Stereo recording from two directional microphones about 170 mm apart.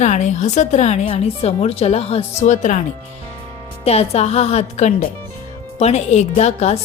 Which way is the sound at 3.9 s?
40° left (ahead or behind).